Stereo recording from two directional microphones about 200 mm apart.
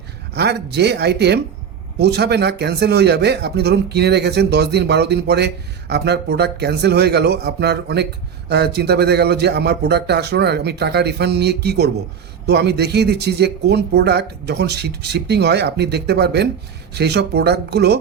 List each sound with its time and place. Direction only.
0.3 s speech: 55° right (ahead or behind)